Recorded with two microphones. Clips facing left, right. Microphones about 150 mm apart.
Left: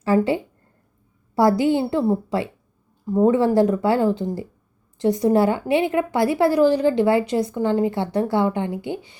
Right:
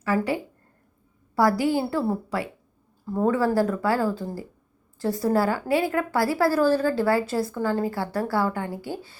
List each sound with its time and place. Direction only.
0.0 s a woman's voice: 25° left (ahead or behind)